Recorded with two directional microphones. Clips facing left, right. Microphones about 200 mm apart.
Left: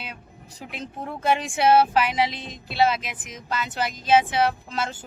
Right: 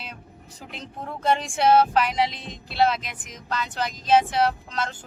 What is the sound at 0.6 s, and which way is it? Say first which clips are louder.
Speech: left 3 dB; 5° left (ahead or behind).